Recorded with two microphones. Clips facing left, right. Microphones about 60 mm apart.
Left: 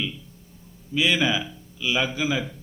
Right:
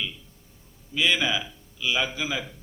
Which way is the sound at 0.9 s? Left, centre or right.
Centre.